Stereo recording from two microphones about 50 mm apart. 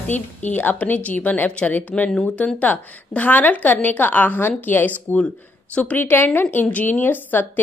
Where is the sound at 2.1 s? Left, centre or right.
Centre.